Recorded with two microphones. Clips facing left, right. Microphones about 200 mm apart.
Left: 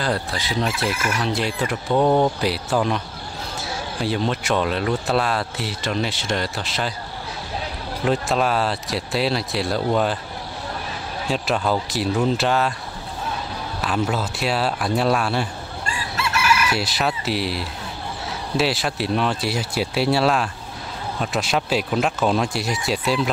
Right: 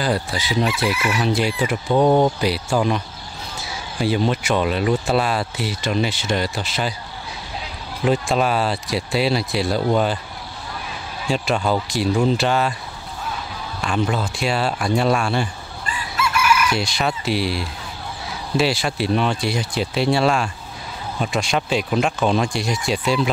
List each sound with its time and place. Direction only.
0.0 s speech: centre (ahead or behind)
0.9 s chicken: 45° left (ahead or behind)
1.2 s speech: centre (ahead or behind)
8.0 s speech: centre (ahead or behind)
11.2 s speech: centre (ahead or behind)
13.7 s speech: 5° left (ahead or behind)
16.7 s speech: 5° left (ahead or behind)